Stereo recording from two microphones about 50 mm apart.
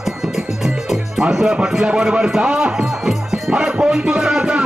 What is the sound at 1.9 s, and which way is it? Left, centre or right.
Speech, centre.